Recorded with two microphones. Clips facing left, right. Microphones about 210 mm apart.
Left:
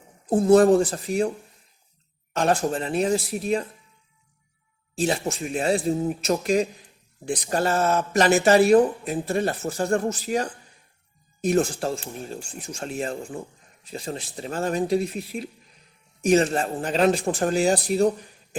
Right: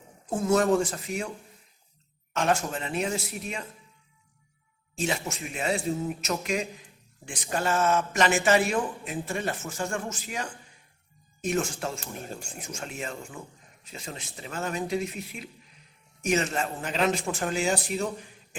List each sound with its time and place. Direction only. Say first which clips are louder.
0.3 s speech: left 7 dB; 35° left (ahead or behind)
2.3 s speech: left 4 dB; 35° left (ahead or behind)
4.9 s speech: left 6 dB; 35° left (ahead or behind)